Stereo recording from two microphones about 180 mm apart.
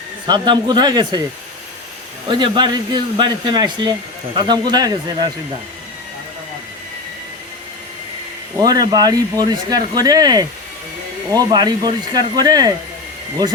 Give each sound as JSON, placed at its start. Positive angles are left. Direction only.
{"t": 0.3, "sound": "speech", "side_deg": -25}
{"t": 2.2, "sound": "speech", "side_deg": -25}
{"t": 8.6, "sound": "speech", "side_deg": -20}